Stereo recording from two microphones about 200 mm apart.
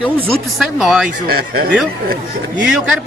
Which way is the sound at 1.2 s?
50° right (ahead or behind).